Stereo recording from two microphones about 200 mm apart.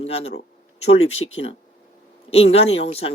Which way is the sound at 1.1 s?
80° left.